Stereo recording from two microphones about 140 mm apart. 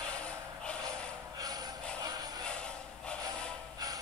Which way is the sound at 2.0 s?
30° right (ahead or behind).